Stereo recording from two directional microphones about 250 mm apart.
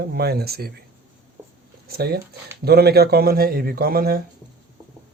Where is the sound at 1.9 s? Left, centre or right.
Right.